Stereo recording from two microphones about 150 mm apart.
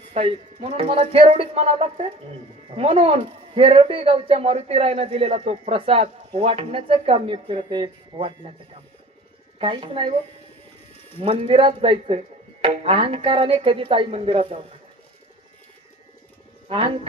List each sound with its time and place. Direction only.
0.1 s speech: 40° right (ahead or behind)
9.6 s speech: 35° right (ahead or behind)
11.4 s speech: 35° right (ahead or behind)
16.6 s speech: 40° right (ahead or behind)